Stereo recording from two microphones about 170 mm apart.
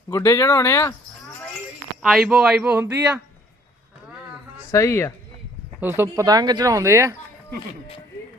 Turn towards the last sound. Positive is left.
turn(degrees=-15)  # may be behind; listen again after turning